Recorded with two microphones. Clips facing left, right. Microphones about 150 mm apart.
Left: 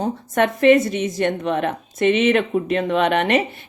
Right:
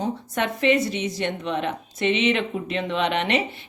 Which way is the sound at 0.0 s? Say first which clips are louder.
Left 6 dB; 50° left (ahead or behind).